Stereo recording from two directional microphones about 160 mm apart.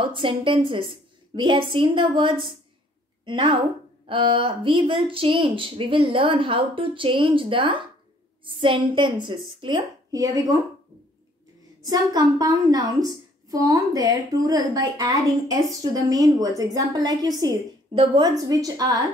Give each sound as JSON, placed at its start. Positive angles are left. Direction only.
{"t": 0.0, "sound": "speech", "side_deg": -30}
{"t": 10.1, "sound": "a woman's voice", "side_deg": -20}
{"t": 11.8, "sound": "a woman's voice", "side_deg": -25}